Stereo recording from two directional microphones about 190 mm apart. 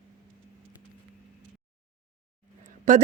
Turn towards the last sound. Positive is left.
turn(degrees=-40)  # may be behind; listen again after turning